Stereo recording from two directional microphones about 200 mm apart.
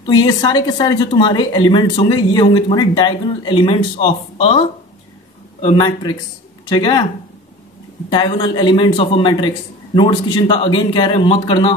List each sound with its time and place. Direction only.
0.0 s speech: 20° left (ahead or behind)
5.7 s speech: 20° left (ahead or behind)
8.1 s speech: 25° left (ahead or behind)